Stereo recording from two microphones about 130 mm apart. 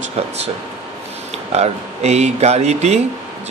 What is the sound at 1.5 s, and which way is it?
A man's voice, 55° right (ahead or behind).